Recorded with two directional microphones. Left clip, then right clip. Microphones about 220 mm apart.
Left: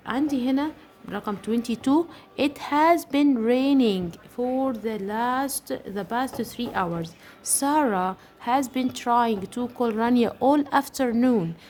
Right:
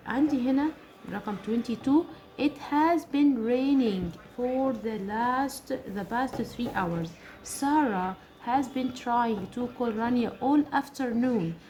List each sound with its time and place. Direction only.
0.0 s speech: 50° left (ahead or behind)